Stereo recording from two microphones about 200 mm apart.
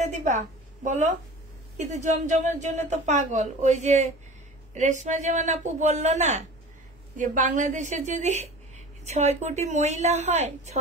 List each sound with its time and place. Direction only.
0.0 s a woman's voice: 35° right (ahead or behind)